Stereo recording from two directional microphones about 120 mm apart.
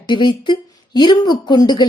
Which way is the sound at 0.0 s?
40° left (ahead or behind).